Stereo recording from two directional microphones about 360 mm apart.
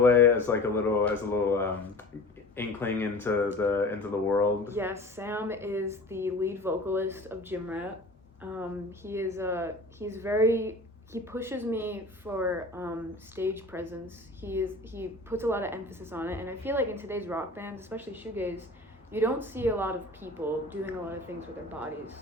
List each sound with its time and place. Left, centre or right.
0.0 s a woman's voice: centre
4.6 s a woman's voice: centre